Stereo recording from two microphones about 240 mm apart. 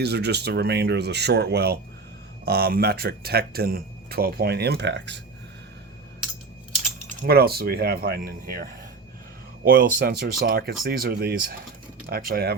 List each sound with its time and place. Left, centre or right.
0.0 s speech: right
7.2 s speech: right